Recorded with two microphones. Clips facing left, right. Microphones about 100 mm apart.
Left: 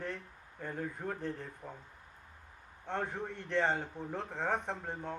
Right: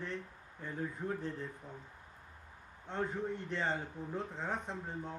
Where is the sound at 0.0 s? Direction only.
50° left (ahead or behind).